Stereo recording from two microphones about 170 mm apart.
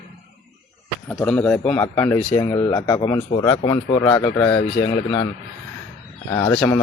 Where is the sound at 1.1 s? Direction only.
5° left (ahead or behind).